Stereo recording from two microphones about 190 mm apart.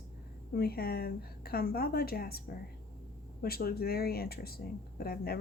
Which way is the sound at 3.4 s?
50° left (ahead or behind).